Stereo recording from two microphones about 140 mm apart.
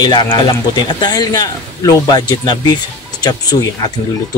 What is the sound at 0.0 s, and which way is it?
A man's voice, 30° left (ahead or behind).